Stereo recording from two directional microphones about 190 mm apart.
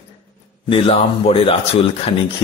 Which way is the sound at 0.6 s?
30° left (ahead or behind).